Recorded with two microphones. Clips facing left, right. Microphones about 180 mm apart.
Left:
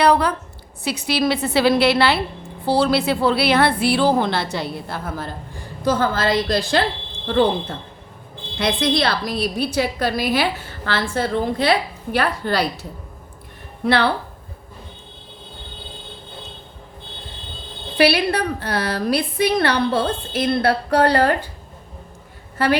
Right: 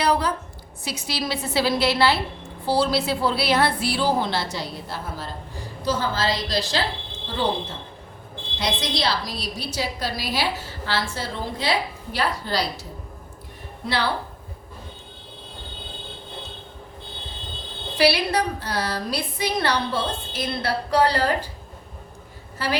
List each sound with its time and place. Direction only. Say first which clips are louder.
0.0 s a sound: left 5 dB; 60° left (ahead or behind)
0.9 s a woman's voice: left 8 dB; 60° left (ahead or behind)
8.5 s a woman's voice: left 7 dB; 55° left (ahead or behind)
13.8 s a woman's voice: left 7 dB; 60° left (ahead or behind)
17.9 s a woman's voice: left 3 dB; 60° left (ahead or behind)
22.5 s a woman's voice: left 7 dB; 60° left (ahead or behind)